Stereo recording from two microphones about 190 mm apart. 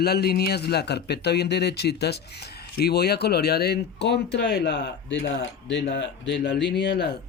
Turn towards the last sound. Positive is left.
turn(degrees=60)  # may be behind; listen again after turning